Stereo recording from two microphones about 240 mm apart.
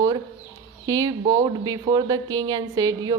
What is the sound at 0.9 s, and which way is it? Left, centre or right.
A woman's voice, centre.